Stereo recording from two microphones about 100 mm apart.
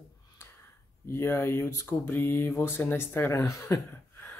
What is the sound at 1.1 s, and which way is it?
Speech, 25° left (ahead or behind).